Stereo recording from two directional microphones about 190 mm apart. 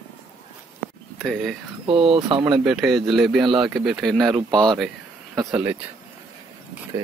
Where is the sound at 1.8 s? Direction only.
30° right (ahead or behind).